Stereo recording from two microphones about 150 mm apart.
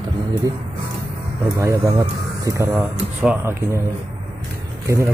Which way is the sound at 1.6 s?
20° right (ahead or behind).